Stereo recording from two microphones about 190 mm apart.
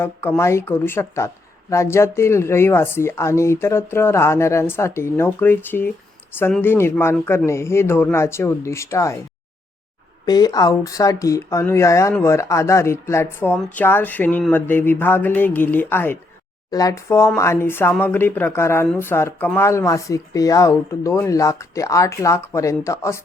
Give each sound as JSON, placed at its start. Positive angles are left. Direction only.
{"t": 0.0, "sound": "speech", "side_deg": 10}
{"t": 10.2, "sound": "speech", "side_deg": 20}